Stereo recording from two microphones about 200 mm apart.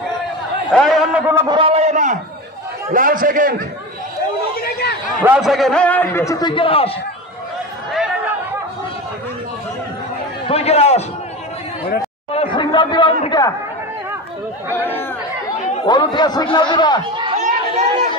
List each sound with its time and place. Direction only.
0.7 s a sound: centre (ahead or behind)
1.5 s a man's voice: 25° right (ahead or behind); by 3.6 s 45° right (ahead or behind)
4.6 s a man's voice: 50° left (ahead or behind)
5.2 s a man's voice: 5° right (ahead or behind); by 6.9 s 25° left (ahead or behind)
10.5 s a man's voice: 30° left (ahead or behind)
12.3 s chatter: 25° left (ahead or behind)
15.8 s speech: 25° left (ahead or behind)
17.2 s chatter: 35° right (ahead or behind)